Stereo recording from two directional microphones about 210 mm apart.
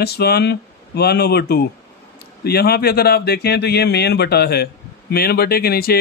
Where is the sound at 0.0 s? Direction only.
50° left (ahead or behind).